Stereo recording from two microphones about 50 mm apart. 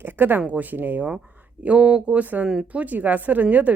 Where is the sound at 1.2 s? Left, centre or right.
Right.